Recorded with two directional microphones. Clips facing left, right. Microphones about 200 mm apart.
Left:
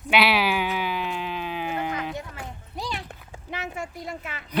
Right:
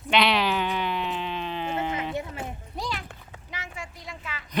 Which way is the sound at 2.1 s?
20° right (ahead or behind).